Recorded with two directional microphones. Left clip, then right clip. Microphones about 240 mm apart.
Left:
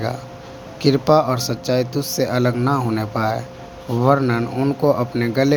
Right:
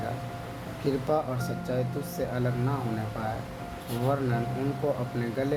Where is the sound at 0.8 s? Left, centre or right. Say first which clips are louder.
Left 13 dB; left.